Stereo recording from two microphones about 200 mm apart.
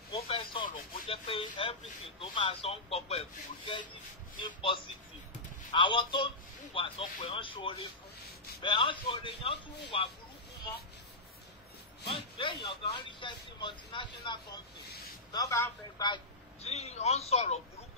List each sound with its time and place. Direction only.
0.3 s a sound: 25° left (ahead or behind)
1.0 s a man's voice: 25° left (ahead or behind)
12.0 s a man's voice: 25° left (ahead or behind)
16.6 s speech: 35° left (ahead or behind)